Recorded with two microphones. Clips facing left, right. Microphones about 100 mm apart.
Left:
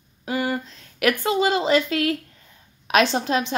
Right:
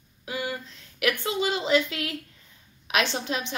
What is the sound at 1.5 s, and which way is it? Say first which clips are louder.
Speech: left 4 dB; 45° left (ahead or behind).